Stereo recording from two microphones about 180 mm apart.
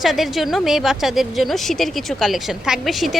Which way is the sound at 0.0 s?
Centre (ahead or behind).